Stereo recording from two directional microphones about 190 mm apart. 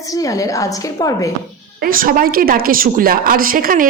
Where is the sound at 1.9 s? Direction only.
45° right (ahead or behind).